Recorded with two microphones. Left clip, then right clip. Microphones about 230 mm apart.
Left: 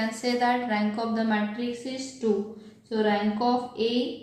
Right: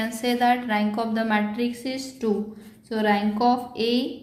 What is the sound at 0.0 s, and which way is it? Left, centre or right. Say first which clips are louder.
Speech: right 3 dB; right.